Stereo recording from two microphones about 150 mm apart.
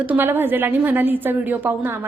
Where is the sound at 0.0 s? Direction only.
10° right (ahead or behind).